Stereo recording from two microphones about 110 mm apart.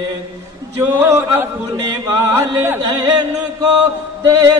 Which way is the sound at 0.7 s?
25° right (ahead or behind).